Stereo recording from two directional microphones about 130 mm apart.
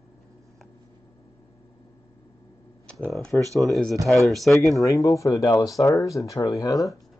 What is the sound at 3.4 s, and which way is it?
Speech, 25° right (ahead or behind).